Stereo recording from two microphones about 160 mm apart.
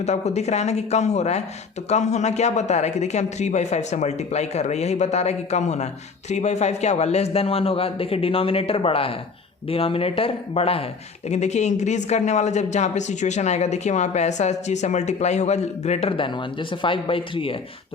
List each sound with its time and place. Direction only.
0.0 s a man's voice: 45° left (ahead or behind)